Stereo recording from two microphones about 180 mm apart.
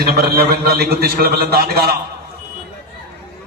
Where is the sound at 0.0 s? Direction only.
60° right (ahead or behind).